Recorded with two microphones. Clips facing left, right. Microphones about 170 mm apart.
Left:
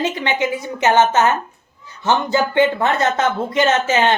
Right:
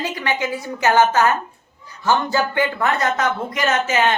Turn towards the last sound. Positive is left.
turn(degrees=30)  # may be behind; listen again after turning